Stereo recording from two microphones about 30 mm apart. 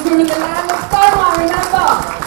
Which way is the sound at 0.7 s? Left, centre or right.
Centre.